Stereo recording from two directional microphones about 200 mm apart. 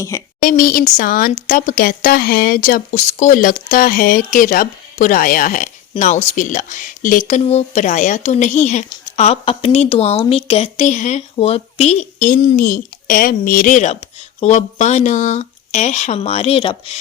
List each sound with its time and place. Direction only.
0.3 s speech: 45° left (ahead or behind); by 17.0 s 30° left (ahead or behind)